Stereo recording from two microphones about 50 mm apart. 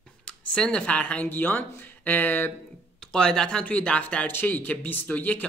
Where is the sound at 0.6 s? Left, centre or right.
Centre.